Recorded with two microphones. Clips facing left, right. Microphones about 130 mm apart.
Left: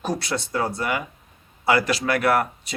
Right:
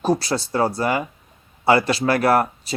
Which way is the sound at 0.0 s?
30° right (ahead or behind).